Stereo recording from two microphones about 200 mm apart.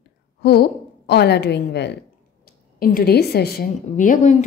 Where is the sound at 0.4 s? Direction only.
55° left (ahead or behind).